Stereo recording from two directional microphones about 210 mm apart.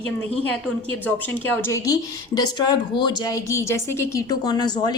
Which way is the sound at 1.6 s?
15° left (ahead or behind).